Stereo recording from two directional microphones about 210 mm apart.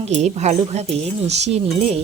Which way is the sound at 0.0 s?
35° right (ahead or behind).